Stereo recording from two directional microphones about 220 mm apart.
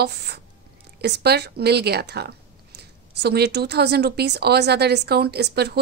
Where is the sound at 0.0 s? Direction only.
50° right (ahead or behind).